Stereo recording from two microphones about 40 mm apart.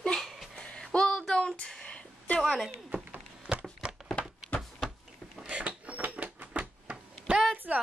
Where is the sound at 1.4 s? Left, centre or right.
Left.